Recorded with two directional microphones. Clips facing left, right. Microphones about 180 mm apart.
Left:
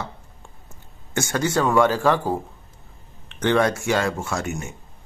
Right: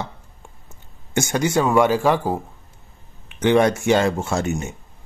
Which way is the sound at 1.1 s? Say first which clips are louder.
Right 3 dB; 15° right (ahead or behind).